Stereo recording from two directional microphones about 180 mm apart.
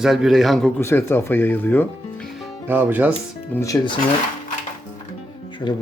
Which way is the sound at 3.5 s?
20° left (ahead or behind).